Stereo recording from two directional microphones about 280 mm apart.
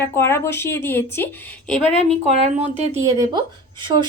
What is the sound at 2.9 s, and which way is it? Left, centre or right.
Speech, centre.